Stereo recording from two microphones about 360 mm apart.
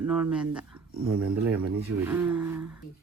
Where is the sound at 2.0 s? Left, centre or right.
Centre.